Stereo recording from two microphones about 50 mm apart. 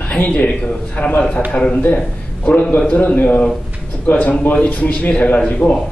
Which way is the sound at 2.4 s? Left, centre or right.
Left.